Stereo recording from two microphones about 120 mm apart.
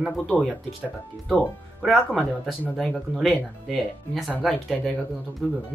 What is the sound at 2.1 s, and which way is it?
Speech, 5° left (ahead or behind).